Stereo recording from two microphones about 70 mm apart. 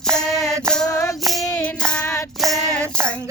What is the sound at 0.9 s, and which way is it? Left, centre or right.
Music, left.